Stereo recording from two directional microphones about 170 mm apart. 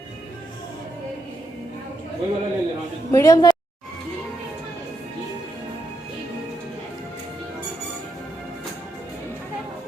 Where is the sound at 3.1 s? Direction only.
20° left (ahead or behind).